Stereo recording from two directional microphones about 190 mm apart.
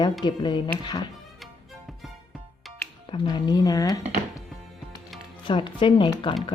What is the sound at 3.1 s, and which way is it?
Speech, 25° left (ahead or behind).